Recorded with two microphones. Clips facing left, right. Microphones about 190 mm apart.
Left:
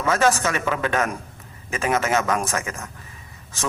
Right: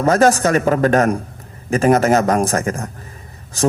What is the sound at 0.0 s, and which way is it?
A man's voice, 40° right (ahead or behind).